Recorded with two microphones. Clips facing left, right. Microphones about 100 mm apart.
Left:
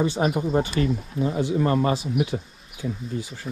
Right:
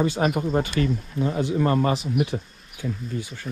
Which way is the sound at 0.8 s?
30° left (ahead or behind).